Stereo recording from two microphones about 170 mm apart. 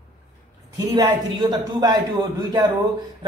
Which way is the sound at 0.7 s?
25° right (ahead or behind).